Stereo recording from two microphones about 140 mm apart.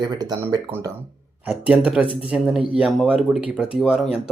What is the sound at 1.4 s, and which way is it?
Speech, 10° right (ahead or behind).